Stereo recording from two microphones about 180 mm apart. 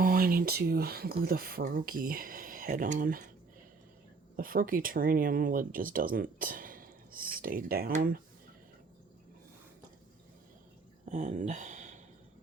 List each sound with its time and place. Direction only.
0.0 s speech: 55° right (ahead or behind)
4.4 s speech: 50° right (ahead or behind)
11.0 s speech: 45° right (ahead or behind)